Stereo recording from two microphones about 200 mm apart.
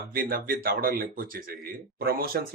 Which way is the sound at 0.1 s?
45° right (ahead or behind).